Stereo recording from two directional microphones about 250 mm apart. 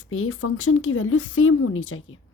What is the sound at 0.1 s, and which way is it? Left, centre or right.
Speech, left.